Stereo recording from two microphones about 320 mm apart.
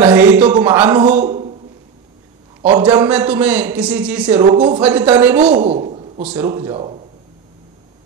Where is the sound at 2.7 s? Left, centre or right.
Centre.